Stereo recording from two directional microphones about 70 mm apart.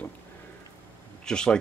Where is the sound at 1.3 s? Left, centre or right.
Centre.